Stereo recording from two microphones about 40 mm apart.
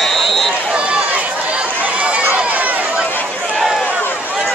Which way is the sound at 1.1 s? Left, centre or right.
Right.